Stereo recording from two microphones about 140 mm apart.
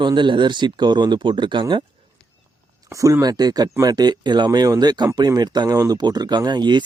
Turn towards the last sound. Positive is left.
turn(degrees=-30)  # may be behind; listen again after turning